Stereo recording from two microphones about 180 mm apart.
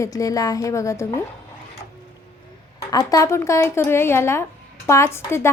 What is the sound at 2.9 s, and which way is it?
A woman's voice, 20° left (ahead or behind).